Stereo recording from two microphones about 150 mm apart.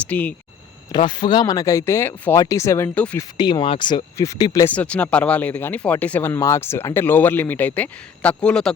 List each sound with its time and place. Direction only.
0.0 s speech: 10° left (ahead or behind)
0.9 s speech: 30° left (ahead or behind); by 3.2 s 10° left (ahead or behind)
3.2 s speech: 30° left (ahead or behind)
4.6 s speech: 10° left (ahead or behind)